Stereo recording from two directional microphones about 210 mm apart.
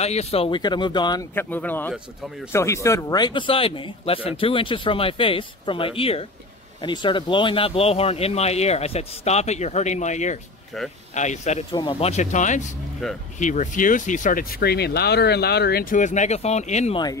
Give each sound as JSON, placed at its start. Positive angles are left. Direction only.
{"t": 0.0, "sound": "speech", "side_deg": 30}
{"t": 10.7, "sound": "speech", "side_deg": 0}
{"t": 11.1, "sound": "speech", "side_deg": 35}
{"t": 13.0, "sound": "speech", "side_deg": 0}
{"t": 13.4, "sound": "speech", "side_deg": 35}